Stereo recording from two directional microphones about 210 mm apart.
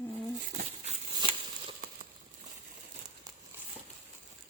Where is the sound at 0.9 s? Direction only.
30° right (ahead or behind).